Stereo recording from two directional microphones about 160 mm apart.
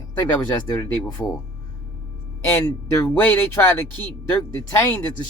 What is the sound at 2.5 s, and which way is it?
Speech, 15° left (ahead or behind).